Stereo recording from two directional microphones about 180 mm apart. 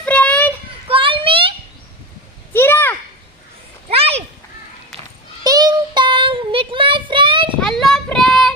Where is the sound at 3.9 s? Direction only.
35° right (ahead or behind).